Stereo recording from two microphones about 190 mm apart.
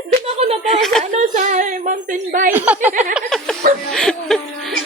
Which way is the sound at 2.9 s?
45° right (ahead or behind).